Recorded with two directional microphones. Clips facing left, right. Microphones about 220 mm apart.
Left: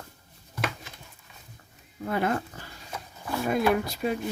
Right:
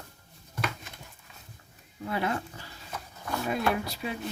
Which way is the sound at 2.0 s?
50° left (ahead or behind).